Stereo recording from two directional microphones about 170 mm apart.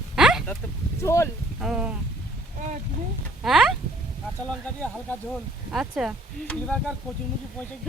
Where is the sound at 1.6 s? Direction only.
5° right (ahead or behind).